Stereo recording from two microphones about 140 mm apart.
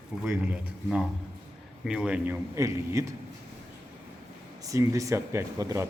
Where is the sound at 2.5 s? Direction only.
20° right (ahead or behind).